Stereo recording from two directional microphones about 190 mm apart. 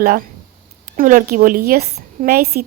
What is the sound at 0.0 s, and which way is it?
Speech, 55° right (ahead or behind).